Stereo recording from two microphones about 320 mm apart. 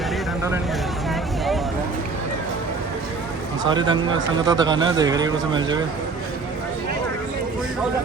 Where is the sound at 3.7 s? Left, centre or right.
Centre.